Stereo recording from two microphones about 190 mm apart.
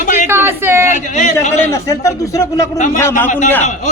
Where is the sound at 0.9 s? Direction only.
40° left (ahead or behind).